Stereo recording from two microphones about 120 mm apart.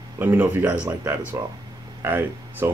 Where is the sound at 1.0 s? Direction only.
20° right (ahead or behind).